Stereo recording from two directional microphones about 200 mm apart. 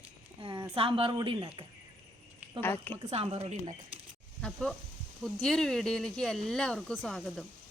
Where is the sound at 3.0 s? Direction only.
30° right (ahead or behind).